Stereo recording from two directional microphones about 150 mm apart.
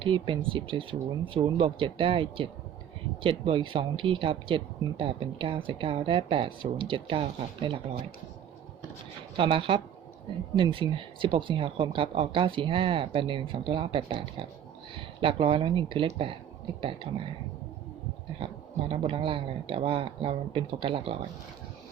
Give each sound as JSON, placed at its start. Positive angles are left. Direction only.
{"t": 0.0, "sound": "speech", "side_deg": -35}
{"t": 9.4, "sound": "speech", "side_deg": -35}
{"t": 18.3, "sound": "speech", "side_deg": -35}